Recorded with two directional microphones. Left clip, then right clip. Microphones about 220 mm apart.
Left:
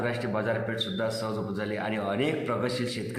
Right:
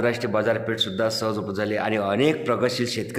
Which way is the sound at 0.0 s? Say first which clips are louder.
Right 7 dB; 50° right (ahead or behind).